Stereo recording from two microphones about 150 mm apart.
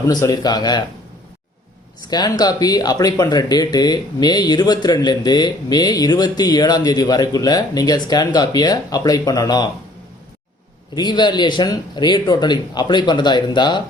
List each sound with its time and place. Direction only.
0.0 s speech: 25° left (ahead or behind)
2.0 s speech: 25° left (ahead or behind)
10.9 s speech: 30° left (ahead or behind)